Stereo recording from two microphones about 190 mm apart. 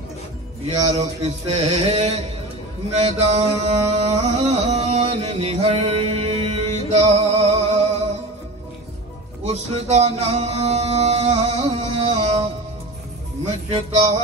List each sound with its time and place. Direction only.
0.7 s music: 35° right (ahead or behind)
9.5 s music: 35° right (ahead or behind)
13.5 s music: 35° right (ahead or behind)